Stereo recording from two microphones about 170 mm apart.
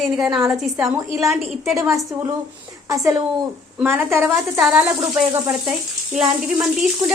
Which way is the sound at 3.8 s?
15° right (ahead or behind).